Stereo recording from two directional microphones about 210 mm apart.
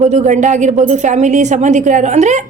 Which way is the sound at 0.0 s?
35° right (ahead or behind).